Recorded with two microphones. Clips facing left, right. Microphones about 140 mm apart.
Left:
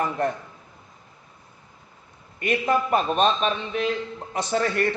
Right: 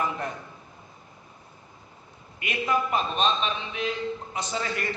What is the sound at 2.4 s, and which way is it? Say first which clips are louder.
A man's voice: left 4 dB; 45° left (ahead or behind).